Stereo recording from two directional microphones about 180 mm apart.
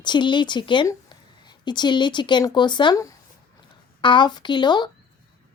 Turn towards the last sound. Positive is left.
turn(degrees=25)  # may be behind; listen again after turning